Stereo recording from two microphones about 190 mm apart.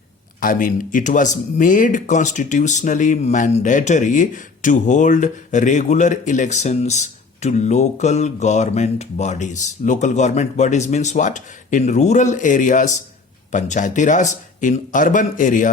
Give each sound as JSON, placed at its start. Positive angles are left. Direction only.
{"t": 0.3, "sound": "speech", "side_deg": 45}